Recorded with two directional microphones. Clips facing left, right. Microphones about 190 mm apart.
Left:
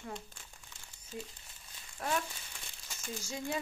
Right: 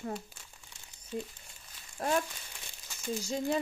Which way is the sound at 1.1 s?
55° right (ahead or behind).